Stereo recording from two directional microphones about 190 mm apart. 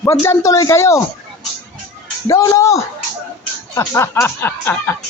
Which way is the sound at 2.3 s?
15° left (ahead or behind).